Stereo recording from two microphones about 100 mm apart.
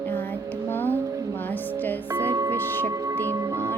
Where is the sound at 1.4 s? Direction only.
20° left (ahead or behind).